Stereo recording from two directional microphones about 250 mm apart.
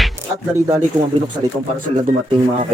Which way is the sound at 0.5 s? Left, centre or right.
Centre.